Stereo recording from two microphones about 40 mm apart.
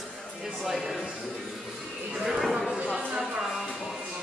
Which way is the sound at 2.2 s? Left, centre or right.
Centre.